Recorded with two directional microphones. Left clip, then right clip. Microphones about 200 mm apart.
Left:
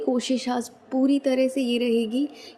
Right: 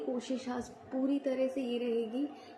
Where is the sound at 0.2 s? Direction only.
45° left (ahead or behind).